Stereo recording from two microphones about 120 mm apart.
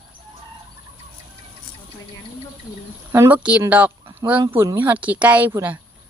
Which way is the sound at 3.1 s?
20° right (ahead or behind).